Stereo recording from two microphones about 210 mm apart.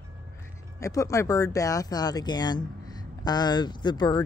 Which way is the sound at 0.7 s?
15° left (ahead or behind).